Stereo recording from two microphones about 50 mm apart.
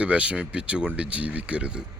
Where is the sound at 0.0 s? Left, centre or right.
Right.